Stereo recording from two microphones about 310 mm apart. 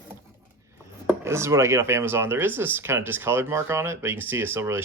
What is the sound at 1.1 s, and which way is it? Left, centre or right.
Speech, centre.